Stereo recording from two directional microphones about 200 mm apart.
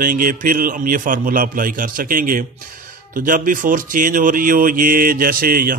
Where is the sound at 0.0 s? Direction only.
45° right (ahead or behind).